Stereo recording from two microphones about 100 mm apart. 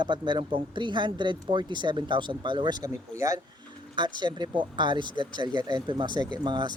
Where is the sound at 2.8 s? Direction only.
30° right (ahead or behind).